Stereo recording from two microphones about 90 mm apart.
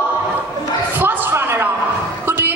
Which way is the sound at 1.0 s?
20° right (ahead or behind).